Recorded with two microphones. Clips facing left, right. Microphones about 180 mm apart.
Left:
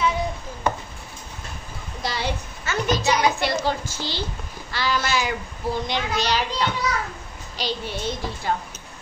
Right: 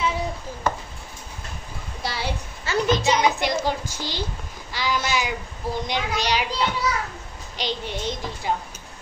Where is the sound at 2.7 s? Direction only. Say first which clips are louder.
Right 3 dB; 35° right (ahead or behind).